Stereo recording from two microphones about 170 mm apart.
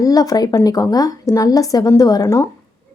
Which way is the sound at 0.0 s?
20° left (ahead or behind).